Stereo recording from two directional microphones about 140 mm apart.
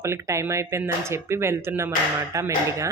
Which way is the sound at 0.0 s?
20° right (ahead or behind).